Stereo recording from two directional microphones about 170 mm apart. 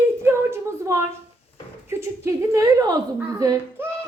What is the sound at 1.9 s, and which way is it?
Male singing, 15° right (ahead or behind).